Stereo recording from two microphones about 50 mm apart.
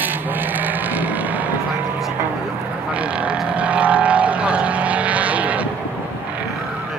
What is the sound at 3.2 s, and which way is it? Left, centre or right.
Vehicle, right.